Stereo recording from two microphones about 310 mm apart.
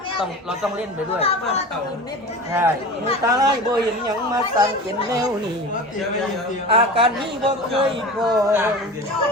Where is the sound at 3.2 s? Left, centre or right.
Centre.